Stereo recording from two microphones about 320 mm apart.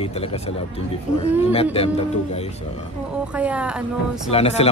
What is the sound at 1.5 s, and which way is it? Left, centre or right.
Speech, centre.